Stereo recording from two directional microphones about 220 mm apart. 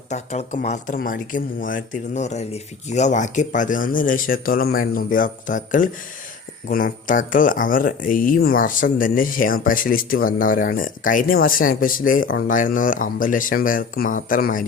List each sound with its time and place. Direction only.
0.1 s speech: 30° left (ahead or behind)